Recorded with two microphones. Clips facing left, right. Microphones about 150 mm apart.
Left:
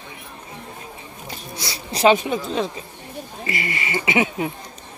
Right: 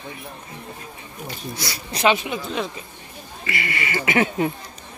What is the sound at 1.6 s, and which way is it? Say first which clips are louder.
Speech: left 4 dB; 30° left (ahead or behind).